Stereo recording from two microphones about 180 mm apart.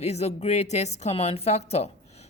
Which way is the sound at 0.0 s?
35° left (ahead or behind).